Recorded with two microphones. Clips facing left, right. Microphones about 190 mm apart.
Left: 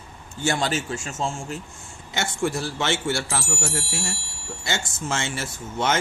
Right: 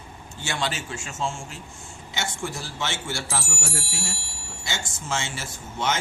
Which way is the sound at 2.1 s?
60° left (ahead or behind).